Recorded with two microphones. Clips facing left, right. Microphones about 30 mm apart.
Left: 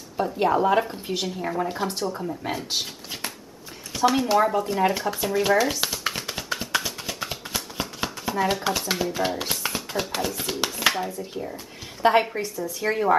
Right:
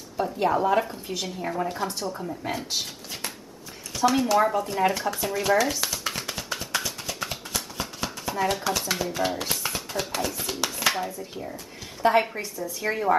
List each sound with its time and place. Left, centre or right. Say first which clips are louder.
0.2 s speech: left 2 dB; centre
0.9 s speech: left 3 dB; left
1.2 s speech: left 1 dB; centre
1.9 s speech: left 3 dB; left
2.2 s speech: left 2 dB; centre
5.8 s a sound: left 2 dB; centre
8.3 s speech: left 2 dB; centre
9.4 s a sound: left 1 dB; centre
9.9 s speech: left 1 dB; centre
11.5 s a sound: left 1 dB; left
12.2 s speech: left 1 dB; centre